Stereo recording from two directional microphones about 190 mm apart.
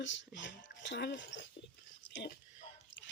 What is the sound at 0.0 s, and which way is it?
Speech, 75° left (ahead or behind).